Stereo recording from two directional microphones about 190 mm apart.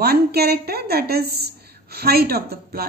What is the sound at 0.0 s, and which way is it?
A woman's voice, 55° right (ahead or behind).